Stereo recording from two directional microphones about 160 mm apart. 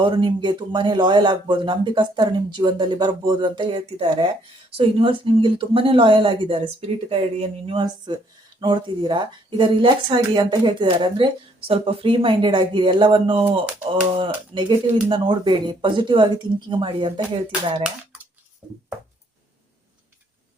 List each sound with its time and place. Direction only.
0.0 s speech: 30° right (ahead or behind)